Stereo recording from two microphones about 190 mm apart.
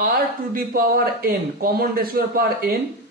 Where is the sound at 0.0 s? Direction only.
55° right (ahead or behind).